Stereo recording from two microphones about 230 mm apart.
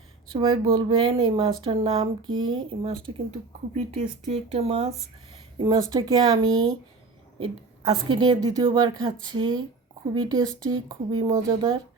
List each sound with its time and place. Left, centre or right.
0.3 s a woman's voice: right
5.5 s a woman's voice: centre
6.5 s speech: centre
7.3 s a woman's voice: right